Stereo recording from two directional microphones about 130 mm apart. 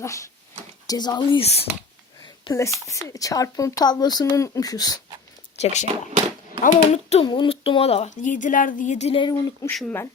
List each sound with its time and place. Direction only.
0.0 s speech: 25° left (ahead or behind)
1.4 s speech: 50° left (ahead or behind)
2.5 s speech: 25° left (ahead or behind)
5.5 s speech: 55° left (ahead or behind)
7.3 s speech: 40° left (ahead or behind)
9.2 s speech: 30° left (ahead or behind)